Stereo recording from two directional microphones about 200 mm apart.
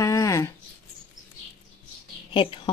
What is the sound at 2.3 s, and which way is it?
Speech, 25° left (ahead or behind).